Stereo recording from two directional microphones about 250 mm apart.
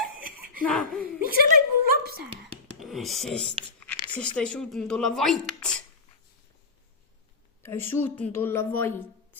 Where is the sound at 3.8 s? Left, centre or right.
Centre.